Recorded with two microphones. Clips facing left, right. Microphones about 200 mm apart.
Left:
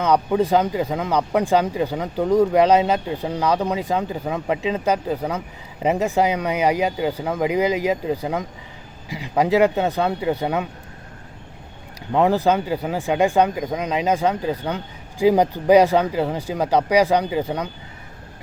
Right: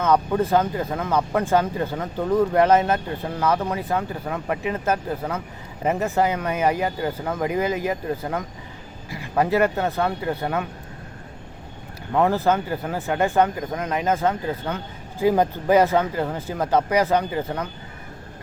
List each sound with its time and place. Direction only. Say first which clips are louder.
0.0 s speech: left 2 dB; 15° left (ahead or behind)
12.1 s speech: left 2 dB; 15° left (ahead or behind)